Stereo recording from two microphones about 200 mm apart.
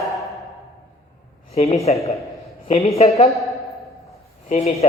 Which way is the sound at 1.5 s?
30° left (ahead or behind).